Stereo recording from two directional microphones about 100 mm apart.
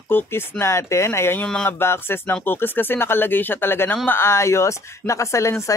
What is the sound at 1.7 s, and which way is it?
Speech, 25° left (ahead or behind).